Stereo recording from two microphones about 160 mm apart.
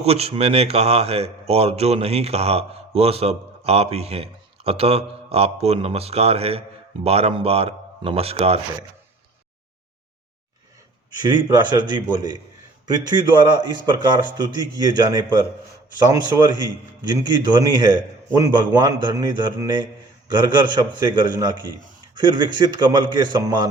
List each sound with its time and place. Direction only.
0.0 s speech: 40° right (ahead or behind)
11.2 s a man's voice: 25° right (ahead or behind)